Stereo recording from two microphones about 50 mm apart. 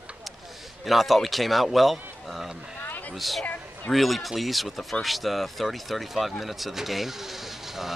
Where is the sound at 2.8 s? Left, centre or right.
Left.